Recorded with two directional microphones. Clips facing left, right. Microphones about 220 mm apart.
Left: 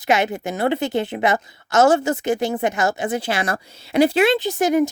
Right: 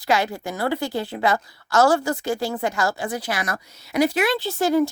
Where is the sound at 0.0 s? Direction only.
20° left (ahead or behind).